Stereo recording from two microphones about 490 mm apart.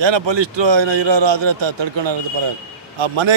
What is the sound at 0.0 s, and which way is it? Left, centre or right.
A man's voice, right.